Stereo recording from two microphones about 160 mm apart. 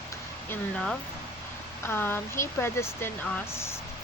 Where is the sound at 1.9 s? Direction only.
15° left (ahead or behind).